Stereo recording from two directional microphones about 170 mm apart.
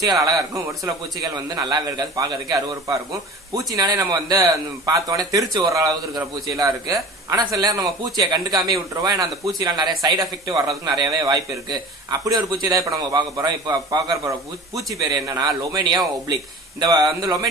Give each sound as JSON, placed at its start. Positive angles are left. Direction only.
{"t": 0.0, "sound": "a man's voice", "side_deg": -25}